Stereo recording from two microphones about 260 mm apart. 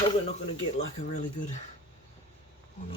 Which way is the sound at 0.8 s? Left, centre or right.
Left.